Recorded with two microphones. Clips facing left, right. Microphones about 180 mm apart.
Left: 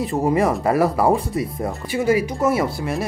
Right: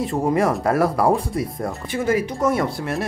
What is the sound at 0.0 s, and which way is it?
Speech, centre (ahead or behind).